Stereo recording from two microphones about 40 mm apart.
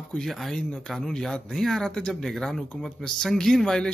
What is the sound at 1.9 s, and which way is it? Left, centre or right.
A man's voice, centre.